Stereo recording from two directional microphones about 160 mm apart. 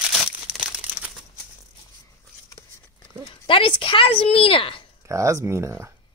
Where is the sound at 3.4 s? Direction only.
35° left (ahead or behind).